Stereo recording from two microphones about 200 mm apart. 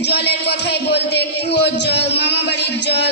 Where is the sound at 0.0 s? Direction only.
55° left (ahead or behind).